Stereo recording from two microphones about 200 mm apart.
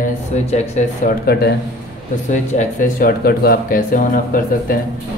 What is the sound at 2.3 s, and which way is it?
A man's voice, 40° left (ahead or behind).